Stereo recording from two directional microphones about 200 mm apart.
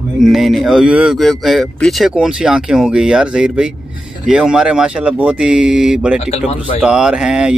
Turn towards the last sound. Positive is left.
turn(degrees=-5)  # may be behind; listen again after turning